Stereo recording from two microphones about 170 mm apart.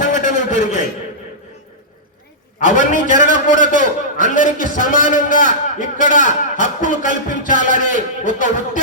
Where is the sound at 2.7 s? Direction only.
50° left (ahead or behind).